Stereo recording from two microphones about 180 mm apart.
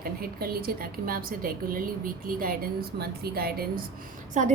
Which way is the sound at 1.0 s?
50° right (ahead or behind).